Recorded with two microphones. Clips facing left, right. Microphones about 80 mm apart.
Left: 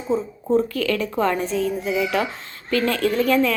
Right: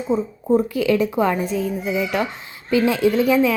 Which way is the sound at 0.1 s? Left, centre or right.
Centre.